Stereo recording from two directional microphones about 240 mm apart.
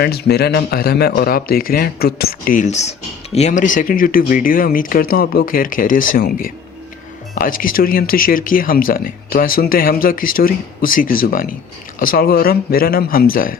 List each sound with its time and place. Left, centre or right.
0.0 s speech: left